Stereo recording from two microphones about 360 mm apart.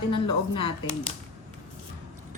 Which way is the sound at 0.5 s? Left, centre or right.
Centre.